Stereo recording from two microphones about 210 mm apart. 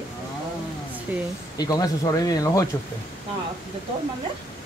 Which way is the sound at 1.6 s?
20° left (ahead or behind).